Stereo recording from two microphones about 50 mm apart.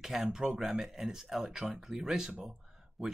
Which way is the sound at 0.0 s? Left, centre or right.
Centre.